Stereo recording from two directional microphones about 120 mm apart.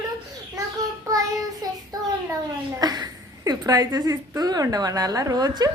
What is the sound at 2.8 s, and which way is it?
A woman's voice, 35° right (ahead or behind).